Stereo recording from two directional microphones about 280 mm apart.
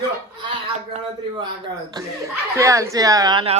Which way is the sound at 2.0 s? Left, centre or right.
Centre.